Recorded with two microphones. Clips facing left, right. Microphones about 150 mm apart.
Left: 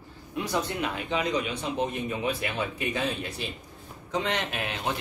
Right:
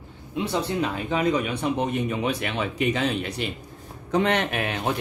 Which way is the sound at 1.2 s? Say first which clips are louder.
Right 5 dB; 55° right (ahead or behind).